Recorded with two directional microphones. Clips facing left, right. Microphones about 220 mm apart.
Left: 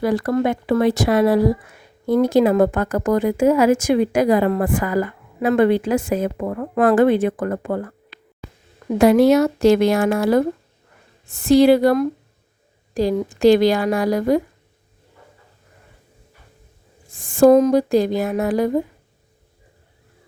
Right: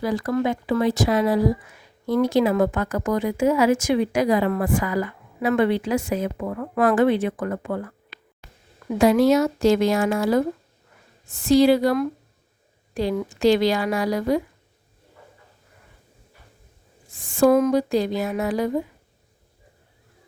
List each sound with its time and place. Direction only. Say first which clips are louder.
0.0 s a woman's voice: left 4 dB; 60° left (ahead or behind); by 7.9 s 45° left (ahead or behind)
9.0 s a woman's voice: left 4 dB; 60° left (ahead or behind)
12.9 s speech: left 5 dB; 40° left (ahead or behind)
17.2 s a sound: left 5 dB; 50° left (ahead or behind)
17.6 s speech: left 4 dB; 45° left (ahead or behind)